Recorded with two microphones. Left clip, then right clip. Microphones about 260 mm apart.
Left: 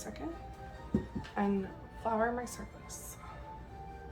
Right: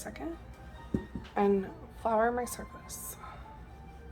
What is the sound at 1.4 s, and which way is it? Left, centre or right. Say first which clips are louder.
A woman's voice: right 7 dB; right.